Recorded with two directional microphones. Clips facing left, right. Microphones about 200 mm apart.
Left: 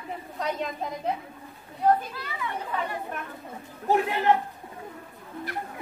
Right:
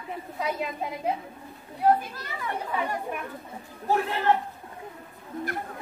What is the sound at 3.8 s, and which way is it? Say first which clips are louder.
Speech: left 2 dB; 15° left (ahead or behind).